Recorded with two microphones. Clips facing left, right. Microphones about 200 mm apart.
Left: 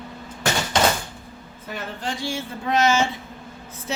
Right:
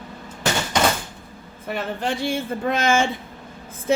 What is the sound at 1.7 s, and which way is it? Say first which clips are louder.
A man's voice: right 5 dB; 60° right (ahead or behind).